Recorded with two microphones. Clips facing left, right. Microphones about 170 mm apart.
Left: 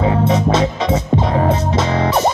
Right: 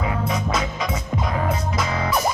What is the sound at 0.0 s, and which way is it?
Music, 30° left (ahead or behind).